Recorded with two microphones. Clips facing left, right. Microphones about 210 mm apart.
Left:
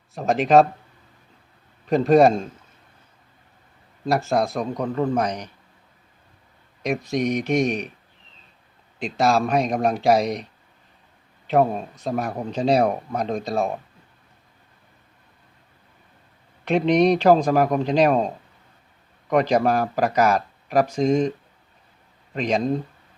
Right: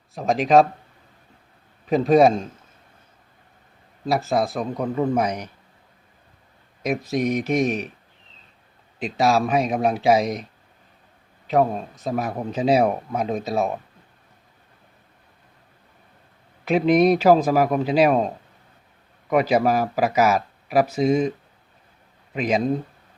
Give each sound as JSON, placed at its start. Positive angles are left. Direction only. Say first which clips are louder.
{"t": 0.1, "sound": "a man's voice", "louder": "even", "side_deg": 0}
{"t": 1.9, "sound": "a man's voice", "louder": "even", "side_deg": 0}
{"t": 4.0, "sound": "a man's voice", "louder": "even", "side_deg": 0}
{"t": 6.8, "sound": "a man's voice", "louder": "even", "side_deg": 0}
{"t": 9.0, "sound": "a man's voice", "louder": "even", "side_deg": -5}
{"t": 16.6, "sound": "a man's voice", "louder": "right 1 dB", "side_deg": -5}